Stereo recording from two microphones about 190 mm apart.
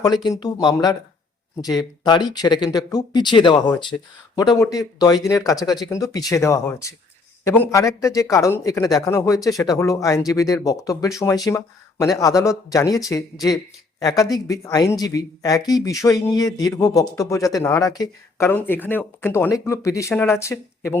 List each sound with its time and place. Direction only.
0.3 s speech: 20° left (ahead or behind)